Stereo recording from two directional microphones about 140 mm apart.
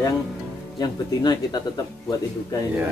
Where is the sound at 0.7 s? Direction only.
30° left (ahead or behind).